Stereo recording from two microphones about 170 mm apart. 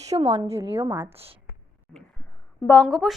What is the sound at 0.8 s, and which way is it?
Speech, 10° right (ahead or behind).